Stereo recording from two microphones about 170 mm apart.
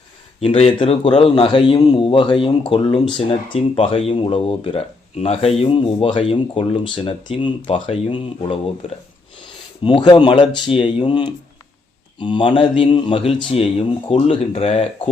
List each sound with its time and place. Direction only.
0.3 s speech: 35° left (ahead or behind)
9.8 s speech: 25° left (ahead or behind)